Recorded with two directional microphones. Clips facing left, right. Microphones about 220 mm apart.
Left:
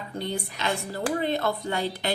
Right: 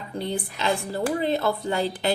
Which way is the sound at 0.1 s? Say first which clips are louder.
Right 3 dB; 30° right (ahead or behind).